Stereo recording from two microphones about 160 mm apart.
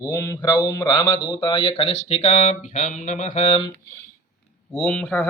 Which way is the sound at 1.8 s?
40° left (ahead or behind).